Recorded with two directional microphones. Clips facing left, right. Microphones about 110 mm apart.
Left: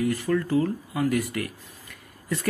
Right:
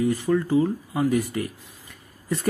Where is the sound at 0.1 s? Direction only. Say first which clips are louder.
Right 2 dB; 20° right (ahead or behind).